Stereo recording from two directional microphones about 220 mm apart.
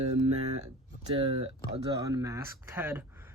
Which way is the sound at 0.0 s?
30° right (ahead or behind).